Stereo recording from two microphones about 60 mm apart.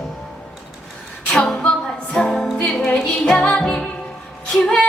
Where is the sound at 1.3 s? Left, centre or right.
Centre.